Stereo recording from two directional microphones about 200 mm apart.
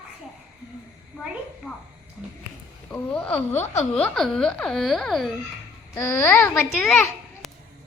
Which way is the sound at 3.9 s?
5° left (ahead or behind).